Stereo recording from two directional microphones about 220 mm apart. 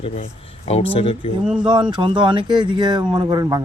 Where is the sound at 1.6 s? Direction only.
20° right (ahead or behind).